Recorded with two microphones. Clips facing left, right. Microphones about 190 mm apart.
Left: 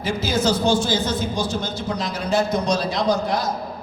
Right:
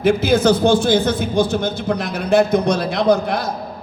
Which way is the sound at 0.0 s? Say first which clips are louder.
Right 7 dB; 60° right (ahead or behind).